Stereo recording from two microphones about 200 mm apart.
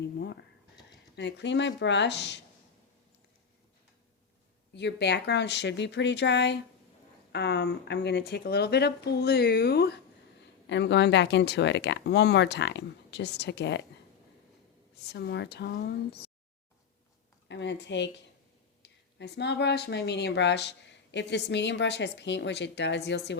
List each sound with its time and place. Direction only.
1.1 s speech: 60° left (ahead or behind)
4.7 s speech: 60° left (ahead or behind)
15.0 s speech: 55° left (ahead or behind)
17.5 s speech: 60° left (ahead or behind)